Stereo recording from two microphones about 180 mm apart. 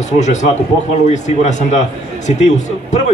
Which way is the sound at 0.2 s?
40° left (ahead or behind).